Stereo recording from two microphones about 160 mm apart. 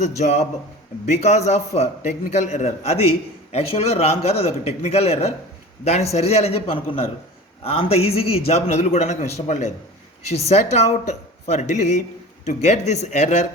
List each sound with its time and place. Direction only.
1.2 s a man's voice: 45° left (ahead or behind)